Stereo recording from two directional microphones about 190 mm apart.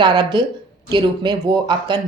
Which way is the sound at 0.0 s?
20° right (ahead or behind).